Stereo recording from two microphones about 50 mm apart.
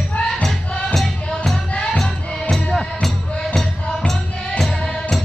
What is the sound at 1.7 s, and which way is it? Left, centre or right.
Music, left.